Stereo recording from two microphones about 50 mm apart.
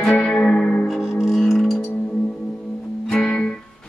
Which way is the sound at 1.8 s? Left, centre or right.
Left.